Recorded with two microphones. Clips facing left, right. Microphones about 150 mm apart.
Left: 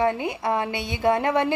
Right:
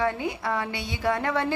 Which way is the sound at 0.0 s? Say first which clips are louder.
Left 4 dB; 20° left (ahead or behind).